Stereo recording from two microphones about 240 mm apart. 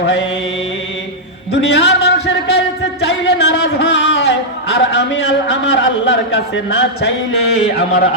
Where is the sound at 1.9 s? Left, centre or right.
Left.